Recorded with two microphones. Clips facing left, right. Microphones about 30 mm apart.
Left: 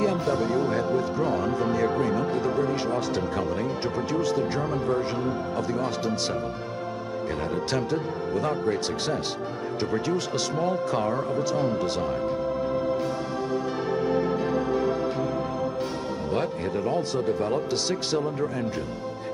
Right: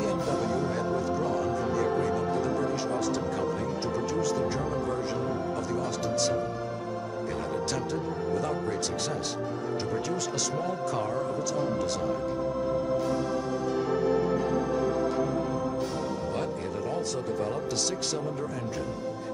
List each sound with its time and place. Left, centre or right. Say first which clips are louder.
0.0 s speech: left 4 dB; left
7.7 s speech: left 4 dB; left
16.3 s speech: left 4 dB; left